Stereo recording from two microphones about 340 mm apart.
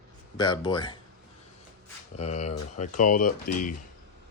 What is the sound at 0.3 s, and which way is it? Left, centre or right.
Speech, centre.